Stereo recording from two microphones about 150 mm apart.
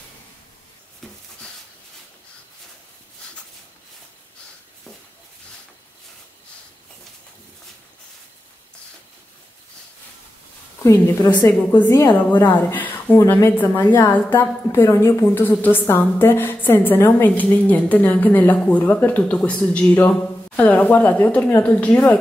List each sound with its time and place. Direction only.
1.0 s a sound: centre (ahead or behind)
10.8 s a woman's voice: 25° left (ahead or behind)
12.4 s a woman's voice: 15° left (ahead or behind)